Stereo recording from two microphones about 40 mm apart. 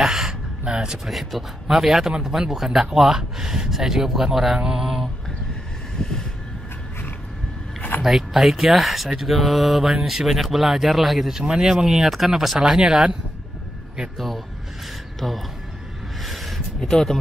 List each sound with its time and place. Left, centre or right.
0.0 s gasp: centre
1.0 s speech: centre
4.7 s mantra: centre
5.9 s vehicle: centre
8.0 s speech: centre
11.3 s speech: centre
14.1 s speech: centre
16.2 s a sound: centre
16.8 s speech: centre